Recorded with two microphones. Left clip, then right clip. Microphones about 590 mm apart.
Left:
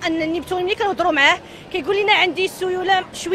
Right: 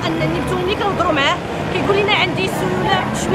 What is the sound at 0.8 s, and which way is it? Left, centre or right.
Speech, left.